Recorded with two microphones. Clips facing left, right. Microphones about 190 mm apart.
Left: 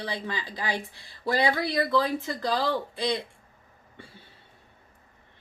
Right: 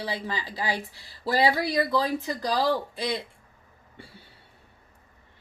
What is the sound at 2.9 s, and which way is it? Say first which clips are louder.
Speech: left 2 dB; 20° left (ahead or behind).